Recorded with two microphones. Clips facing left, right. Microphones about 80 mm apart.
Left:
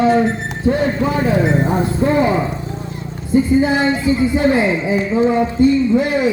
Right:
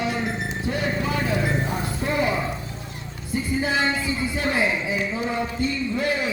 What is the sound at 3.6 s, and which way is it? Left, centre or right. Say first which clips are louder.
Speech: left 8 dB; left.